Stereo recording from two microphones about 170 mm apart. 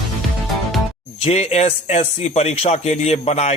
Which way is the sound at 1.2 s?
40° left (ahead or behind).